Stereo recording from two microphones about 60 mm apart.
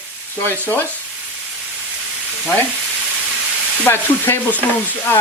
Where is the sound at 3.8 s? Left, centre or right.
Left.